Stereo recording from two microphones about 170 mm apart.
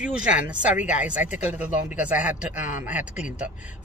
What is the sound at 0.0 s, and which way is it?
Speech, 5° right (ahead or behind).